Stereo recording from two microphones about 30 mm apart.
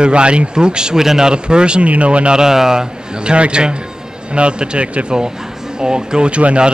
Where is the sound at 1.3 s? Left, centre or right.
Right.